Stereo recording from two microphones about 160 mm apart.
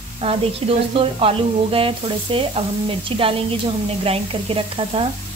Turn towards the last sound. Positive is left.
turn(degrees=-35)  # may be behind; listen again after turning